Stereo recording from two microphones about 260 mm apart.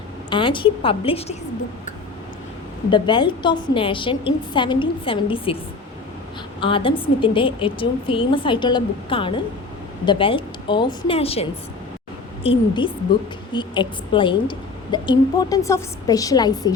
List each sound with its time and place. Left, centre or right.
0.3 s a woman's voice: centre
2.9 s a woman's voice: centre
6.6 s a woman's voice: centre